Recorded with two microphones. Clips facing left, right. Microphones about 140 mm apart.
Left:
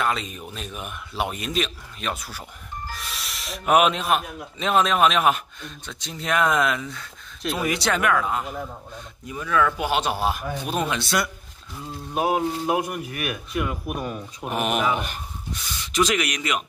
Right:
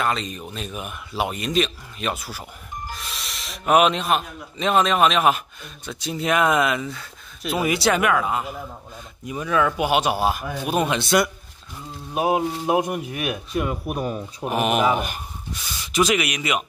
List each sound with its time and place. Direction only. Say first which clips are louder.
0.0 s a man's voice: right 1 dB; 5° left (ahead or behind)
9.2 s speech: right 1 dB; 20° right (ahead or behind)
12.3 s speech: right 2 dB; 25° right (ahead or behind)
14.5 s a man's voice: right 3 dB; centre (ahead or behind)
14.8 s a sound: right 4 dB; 40° right (ahead or behind)
15.9 s speech: right 2 dB; 10° right (ahead or behind)